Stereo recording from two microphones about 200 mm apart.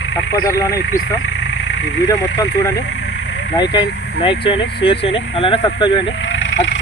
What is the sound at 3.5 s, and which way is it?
Speech, 20° left (ahead or behind).